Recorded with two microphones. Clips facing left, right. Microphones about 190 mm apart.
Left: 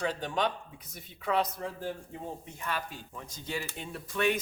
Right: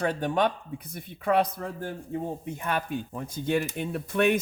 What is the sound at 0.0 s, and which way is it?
Speech, 55° right (ahead or behind).